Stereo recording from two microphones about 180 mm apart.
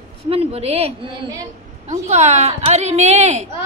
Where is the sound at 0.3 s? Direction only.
35° right (ahead or behind).